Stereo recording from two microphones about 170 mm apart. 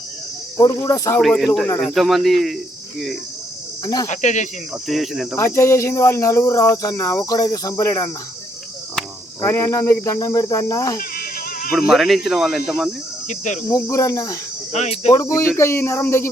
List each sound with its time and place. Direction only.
0.5 s speech: 20° left (ahead or behind)
1.2 s speech: centre (ahead or behind)
4.0 s speech: 45° left (ahead or behind)
4.9 s speech: centre (ahead or behind)
5.5 s speech: 15° left (ahead or behind)
9.4 s speech: 15° left (ahead or behind)
11.1 s a sound: 60° left (ahead or behind)
11.7 s speech: centre (ahead or behind)
13.2 s speech: 45° left (ahead or behind)
13.7 s speech: 15° left (ahead or behind)
14.7 s speech: 40° left (ahead or behind)
15.1 s speech: 15° left (ahead or behind)